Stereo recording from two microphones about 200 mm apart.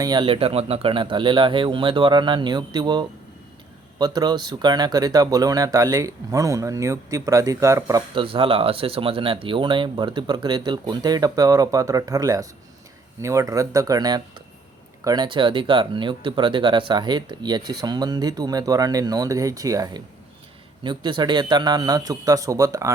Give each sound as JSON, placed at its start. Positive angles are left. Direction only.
{"t": 0.0, "sound": "speech", "side_deg": -20}